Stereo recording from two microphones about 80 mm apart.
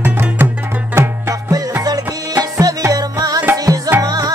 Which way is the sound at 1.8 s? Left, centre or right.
Right.